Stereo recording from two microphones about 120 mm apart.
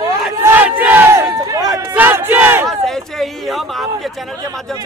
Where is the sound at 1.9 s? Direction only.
15° right (ahead or behind).